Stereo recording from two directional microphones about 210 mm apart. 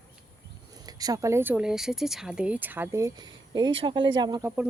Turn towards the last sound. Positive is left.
turn(degrees=-10)  # may be behind; listen again after turning